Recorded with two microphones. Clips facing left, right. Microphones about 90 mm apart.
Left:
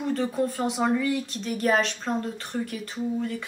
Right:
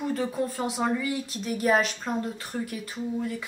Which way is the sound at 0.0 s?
Centre (ahead or behind).